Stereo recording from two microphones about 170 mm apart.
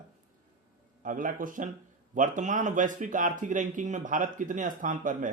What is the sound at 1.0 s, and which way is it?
A man's voice, 50° right (ahead or behind).